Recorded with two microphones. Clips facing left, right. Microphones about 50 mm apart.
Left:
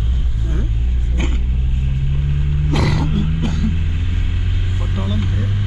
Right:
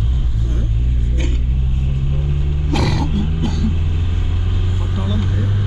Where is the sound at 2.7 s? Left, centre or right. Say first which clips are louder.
Even; centre.